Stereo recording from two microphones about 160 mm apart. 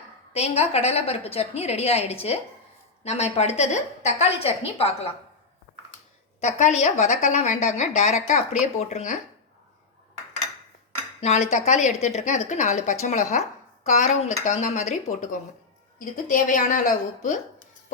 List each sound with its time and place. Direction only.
0.3 s a woman's voice: 40° left (ahead or behind)
6.4 s a woman's voice: 45° left (ahead or behind)
11.2 s dishes: 45° left (ahead or behind)
11.5 s a woman's voice: 45° left (ahead or behind)